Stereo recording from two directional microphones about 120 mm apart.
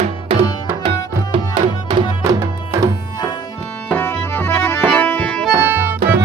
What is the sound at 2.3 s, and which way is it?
Music, 25° right (ahead or behind).